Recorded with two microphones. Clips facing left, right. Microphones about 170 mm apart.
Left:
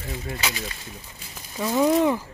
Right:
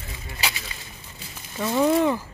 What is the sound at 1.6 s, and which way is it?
Speech, 5° left (ahead or behind).